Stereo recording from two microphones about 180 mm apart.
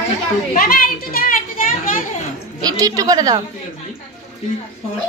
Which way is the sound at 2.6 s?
20° right (ahead or behind).